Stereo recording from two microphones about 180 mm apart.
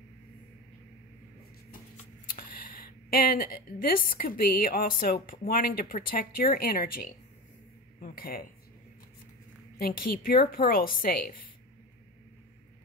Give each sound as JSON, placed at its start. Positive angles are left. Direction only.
{"t": 2.2, "sound": "speech", "side_deg": 50}
{"t": 9.8, "sound": "speech", "side_deg": 55}